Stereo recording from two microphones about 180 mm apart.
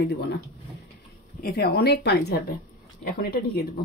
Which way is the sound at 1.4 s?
60° left (ahead or behind).